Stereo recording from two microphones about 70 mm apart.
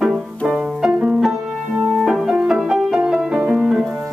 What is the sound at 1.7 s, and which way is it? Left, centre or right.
Music, right.